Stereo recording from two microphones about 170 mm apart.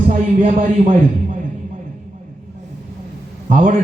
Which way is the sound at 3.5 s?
50° right (ahead or behind).